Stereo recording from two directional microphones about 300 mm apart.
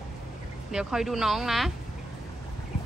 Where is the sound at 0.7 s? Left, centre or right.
Centre.